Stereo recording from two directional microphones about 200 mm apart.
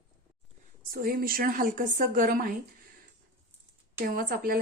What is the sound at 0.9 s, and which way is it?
A woman's voice, 45° right (ahead or behind).